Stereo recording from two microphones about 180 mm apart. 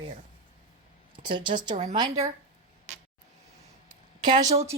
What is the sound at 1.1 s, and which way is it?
Speech, 25° right (ahead or behind).